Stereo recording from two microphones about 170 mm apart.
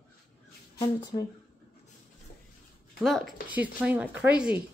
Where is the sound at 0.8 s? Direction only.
25° left (ahead or behind).